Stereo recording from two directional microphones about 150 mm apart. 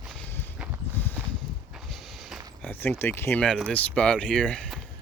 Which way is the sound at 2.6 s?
10° left (ahead or behind).